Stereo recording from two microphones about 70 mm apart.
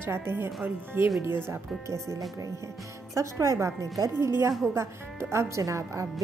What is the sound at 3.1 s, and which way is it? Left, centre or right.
A woman's voice, right.